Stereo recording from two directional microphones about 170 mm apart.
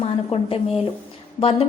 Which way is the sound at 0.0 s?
35° left (ahead or behind).